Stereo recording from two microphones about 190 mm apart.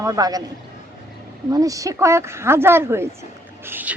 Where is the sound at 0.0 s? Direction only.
20° right (ahead or behind).